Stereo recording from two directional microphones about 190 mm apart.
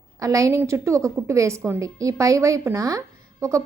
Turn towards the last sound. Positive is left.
turn(degrees=-15)  # may be behind; listen again after turning